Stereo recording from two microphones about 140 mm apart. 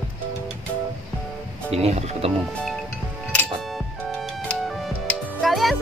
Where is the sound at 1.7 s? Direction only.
50° right (ahead or behind).